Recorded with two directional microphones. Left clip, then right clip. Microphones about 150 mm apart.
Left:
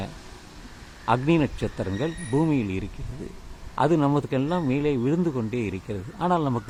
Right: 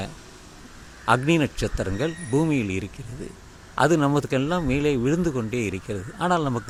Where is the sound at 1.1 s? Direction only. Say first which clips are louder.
Right 2 dB; 15° right (ahead or behind).